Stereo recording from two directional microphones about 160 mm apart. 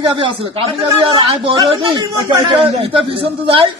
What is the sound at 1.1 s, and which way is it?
Speech, 30° right (ahead or behind).